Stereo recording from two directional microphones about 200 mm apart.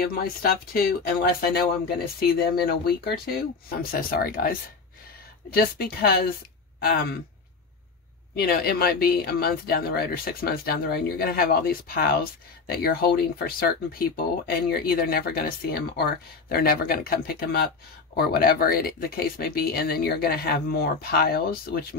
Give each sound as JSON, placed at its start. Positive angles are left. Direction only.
{"t": 0.0, "sound": "speech", "side_deg": 50}
{"t": 8.4, "sound": "speech", "side_deg": 50}